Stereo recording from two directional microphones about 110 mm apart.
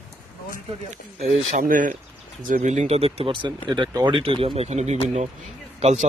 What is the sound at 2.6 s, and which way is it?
Speech, 90° right.